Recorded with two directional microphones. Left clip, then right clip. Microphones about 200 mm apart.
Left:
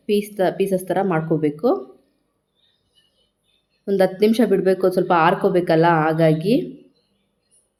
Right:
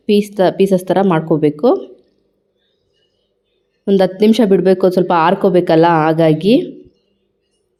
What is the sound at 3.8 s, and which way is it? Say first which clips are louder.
A woman's voice: right 5 dB; 30° right (ahead or behind).